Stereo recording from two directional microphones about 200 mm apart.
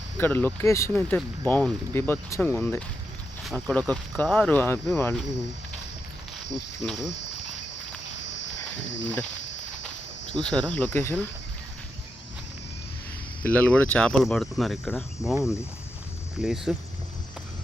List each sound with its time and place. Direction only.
0.2 s speech: 10° left (ahead or behind)
8.2 s livestock: 65° left (ahead or behind)
9.4 s walk: 65° left (ahead or behind)
10.4 s speech: 5° left (ahead or behind)
13.4 s speech: 10° left (ahead or behind)
16.4 s speech: 5° right (ahead or behind)